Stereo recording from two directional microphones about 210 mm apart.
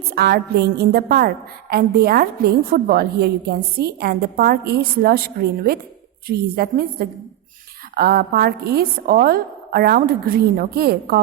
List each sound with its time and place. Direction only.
0.1 s a woman's voice: 45° right (ahead or behind)